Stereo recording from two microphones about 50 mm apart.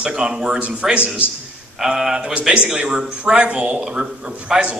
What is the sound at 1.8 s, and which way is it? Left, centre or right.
Speech, centre.